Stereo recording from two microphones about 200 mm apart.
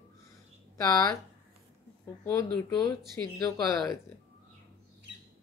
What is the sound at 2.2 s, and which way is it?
Speech, 15° left (ahead or behind).